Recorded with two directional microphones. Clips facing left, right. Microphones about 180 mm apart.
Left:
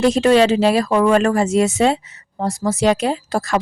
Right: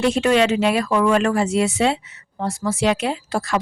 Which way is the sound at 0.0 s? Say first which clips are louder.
Left 4 dB; 35° left (ahead or behind).